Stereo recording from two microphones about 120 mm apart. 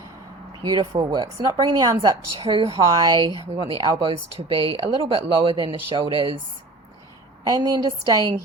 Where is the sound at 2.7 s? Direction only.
30° right (ahead or behind).